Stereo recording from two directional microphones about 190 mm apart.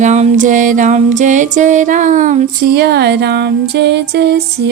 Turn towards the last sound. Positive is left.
turn(degrees=-60)  # may be behind; listen again after turning